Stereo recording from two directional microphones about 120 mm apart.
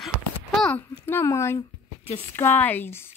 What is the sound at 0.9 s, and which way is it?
Speech, 20° left (ahead or behind).